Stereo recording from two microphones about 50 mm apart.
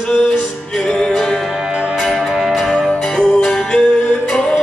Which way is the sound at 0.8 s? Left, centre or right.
Centre.